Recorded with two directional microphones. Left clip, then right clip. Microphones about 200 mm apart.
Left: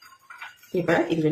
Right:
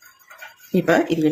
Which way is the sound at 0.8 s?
50° right (ahead or behind).